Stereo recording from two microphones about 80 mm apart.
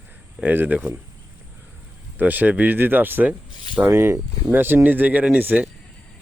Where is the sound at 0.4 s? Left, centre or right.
Right.